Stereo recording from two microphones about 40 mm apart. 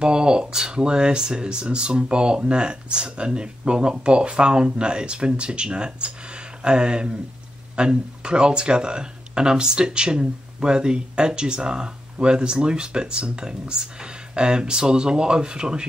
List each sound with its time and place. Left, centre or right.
0.0 s speech: right